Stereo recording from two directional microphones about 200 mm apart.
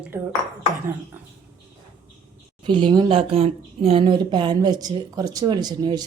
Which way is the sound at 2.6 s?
25° right (ahead or behind).